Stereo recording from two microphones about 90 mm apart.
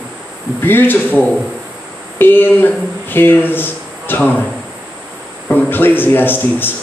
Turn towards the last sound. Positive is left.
turn(degrees=20)  # may be behind; listen again after turning